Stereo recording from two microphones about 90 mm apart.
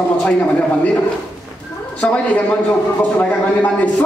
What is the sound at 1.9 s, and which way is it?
A man's voice, 15° left (ahead or behind).